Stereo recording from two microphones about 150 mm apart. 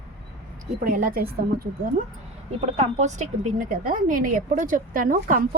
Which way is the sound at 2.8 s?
50° right (ahead or behind).